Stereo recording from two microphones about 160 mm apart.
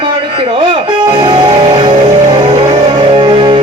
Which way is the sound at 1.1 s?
35° right (ahead or behind).